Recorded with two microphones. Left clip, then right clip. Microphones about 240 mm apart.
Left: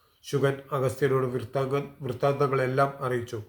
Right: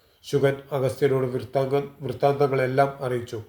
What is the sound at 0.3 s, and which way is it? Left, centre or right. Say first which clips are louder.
Speech: right 4 dB; centre.